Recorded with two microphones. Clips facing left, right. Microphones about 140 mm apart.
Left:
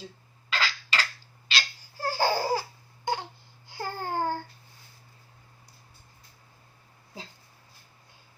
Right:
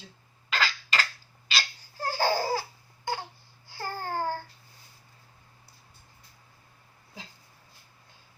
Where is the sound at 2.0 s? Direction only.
15° left (ahead or behind).